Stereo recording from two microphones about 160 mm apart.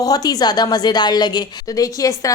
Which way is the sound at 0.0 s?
25° left (ahead or behind).